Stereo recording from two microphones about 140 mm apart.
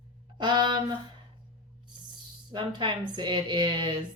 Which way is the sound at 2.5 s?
35° right (ahead or behind).